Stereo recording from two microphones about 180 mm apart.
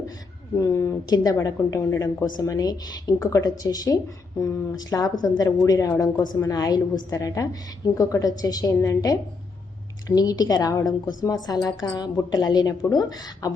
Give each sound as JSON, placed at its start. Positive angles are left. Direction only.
{"t": 0.6, "sound": "a woman's voice", "side_deg": 15}
{"t": 10.2, "sound": "a woman's voice", "side_deg": 20}